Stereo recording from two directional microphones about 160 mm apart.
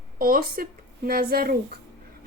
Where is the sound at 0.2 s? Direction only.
65° right (ahead or behind).